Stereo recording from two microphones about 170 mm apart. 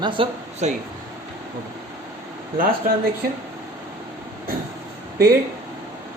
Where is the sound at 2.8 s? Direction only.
55° right (ahead or behind).